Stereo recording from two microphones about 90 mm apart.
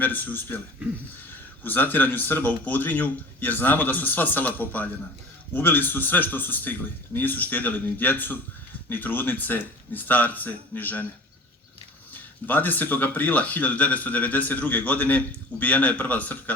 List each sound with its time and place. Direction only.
0.0 s speech: 20° left (ahead or behind)
1.6 s speech: 20° left (ahead or behind)
12.5 s speech: 20° left (ahead or behind)